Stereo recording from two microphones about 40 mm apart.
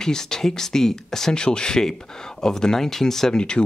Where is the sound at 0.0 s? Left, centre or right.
Centre.